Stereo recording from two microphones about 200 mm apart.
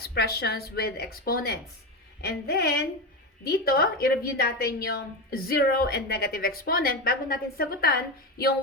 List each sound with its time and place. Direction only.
0.0 s a woman's voice: 50° left (ahead or behind)